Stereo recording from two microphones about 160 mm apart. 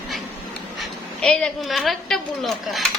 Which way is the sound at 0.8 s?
5° left (ahead or behind).